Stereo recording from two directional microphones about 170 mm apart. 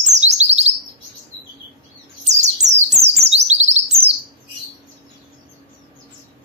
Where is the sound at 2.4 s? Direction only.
40° right (ahead or behind).